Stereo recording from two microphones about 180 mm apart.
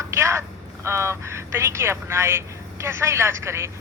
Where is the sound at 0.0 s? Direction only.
15° right (ahead or behind).